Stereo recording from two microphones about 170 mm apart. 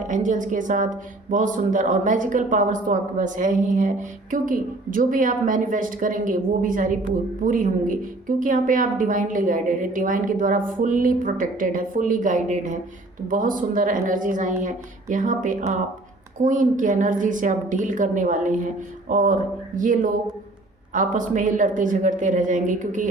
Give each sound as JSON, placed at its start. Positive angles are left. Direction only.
{"t": 0.1, "sound": "speech", "side_deg": -50}